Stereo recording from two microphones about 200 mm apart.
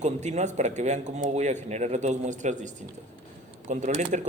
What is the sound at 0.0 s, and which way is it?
Speech, 35° right (ahead or behind).